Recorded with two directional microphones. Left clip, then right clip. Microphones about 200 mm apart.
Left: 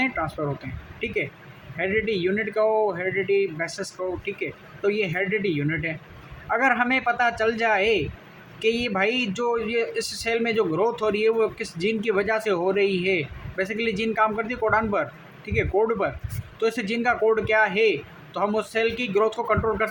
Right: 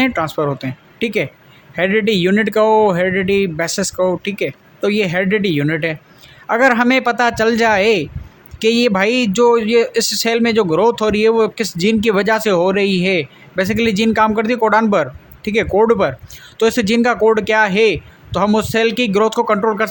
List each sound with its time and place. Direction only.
0.0 s a man's voice: 55° right (ahead or behind)